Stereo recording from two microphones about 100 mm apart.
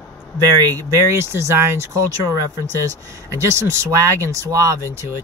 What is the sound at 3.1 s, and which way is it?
Speech, 30° right (ahead or behind).